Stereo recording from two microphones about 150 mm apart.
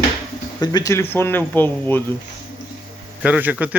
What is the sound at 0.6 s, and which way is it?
Speech, 25° left (ahead or behind).